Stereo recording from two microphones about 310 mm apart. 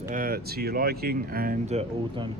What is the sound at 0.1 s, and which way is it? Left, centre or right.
Speech, right.